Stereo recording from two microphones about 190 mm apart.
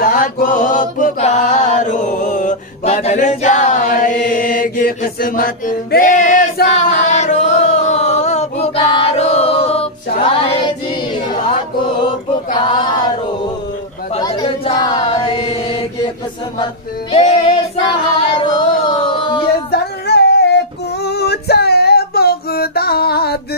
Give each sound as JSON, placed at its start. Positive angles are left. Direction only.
{"t": 0.0, "sound": "chant", "side_deg": 45}
{"t": 6.9, "sound": "a sound", "side_deg": 40}
{"t": 12.5, "sound": "male singing", "side_deg": 25}
{"t": 14.2, "sound": "chatter", "side_deg": 20}
{"t": 14.7, "sound": "chant", "side_deg": 25}
{"t": 17.1, "sound": "female singing", "side_deg": 30}
{"t": 19.7, "sound": "female singing", "side_deg": 60}